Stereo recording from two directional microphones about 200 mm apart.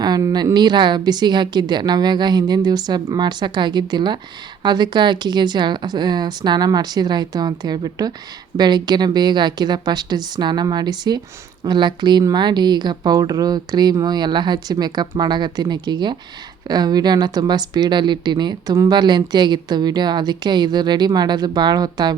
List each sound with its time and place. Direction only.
0.0 s speech: 20° right (ahead or behind)